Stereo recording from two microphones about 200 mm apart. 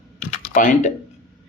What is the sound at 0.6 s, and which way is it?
Speech, 40° left (ahead or behind).